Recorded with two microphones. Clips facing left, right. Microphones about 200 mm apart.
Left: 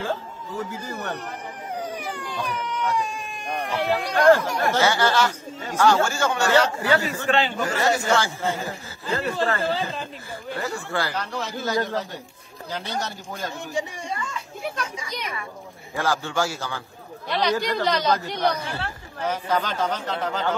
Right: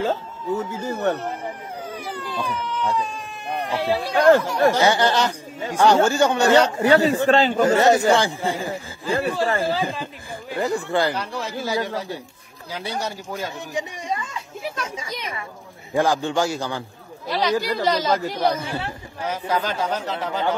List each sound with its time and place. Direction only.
0.6 s speech: 20° right (ahead or behind)
1.8 s a sound: 15° left (ahead or behind)
3.6 s speech: 15° right (ahead or behind)
7.2 s a man's voice: 40° right (ahead or behind)
7.6 s speech: 20° right (ahead or behind)
17.3 s speech: centre (ahead or behind)
18.6 s speech: 15° right (ahead or behind)